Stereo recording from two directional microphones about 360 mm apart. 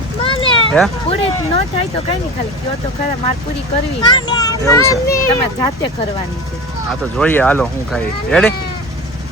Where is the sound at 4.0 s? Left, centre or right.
Centre.